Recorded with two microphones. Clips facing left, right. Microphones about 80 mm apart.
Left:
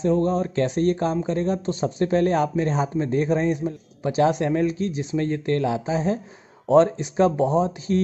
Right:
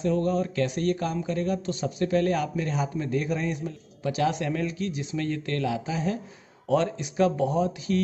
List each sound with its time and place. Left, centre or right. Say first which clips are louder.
0.0 s speech: left 4 dB; left